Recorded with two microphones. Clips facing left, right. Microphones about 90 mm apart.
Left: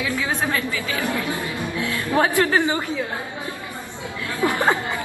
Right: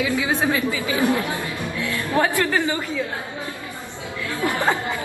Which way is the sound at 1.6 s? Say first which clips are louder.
Left 1 dB; 20° left (ahead or behind).